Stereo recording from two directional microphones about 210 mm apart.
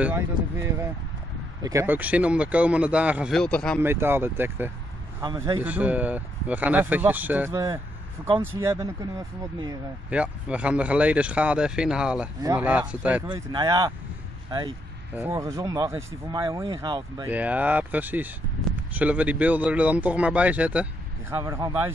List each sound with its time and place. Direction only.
0.0 s speech: 10° right (ahead or behind); by 3.8 s 5° left (ahead or behind)
3.8 s speech: 10° right (ahead or behind)
5.2 s speech: 20° right (ahead or behind)
5.6 s speech: 5° right (ahead or behind)
10.0 s speech: 5° right (ahead or behind)
13.3 s speech: 20° right (ahead or behind)
15.1 s speech: 10° right (ahead or behind)
17.3 s speech: 5° right (ahead or behind)